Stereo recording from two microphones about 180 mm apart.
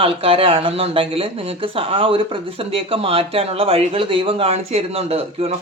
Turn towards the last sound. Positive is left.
turn(degrees=-35)  # may be behind; listen again after turning